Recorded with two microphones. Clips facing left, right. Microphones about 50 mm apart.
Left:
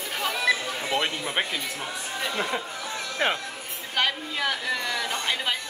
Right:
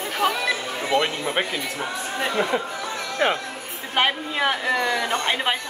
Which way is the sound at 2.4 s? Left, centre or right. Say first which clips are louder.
Right 6 dB; centre.